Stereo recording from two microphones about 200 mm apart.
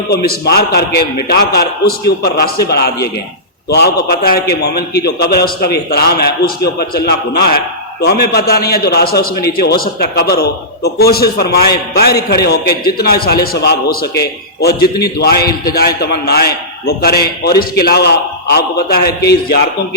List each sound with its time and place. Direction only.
0.4 s a man's voice: 55° left (ahead or behind)
13.0 s a man's voice: 50° left (ahead or behind)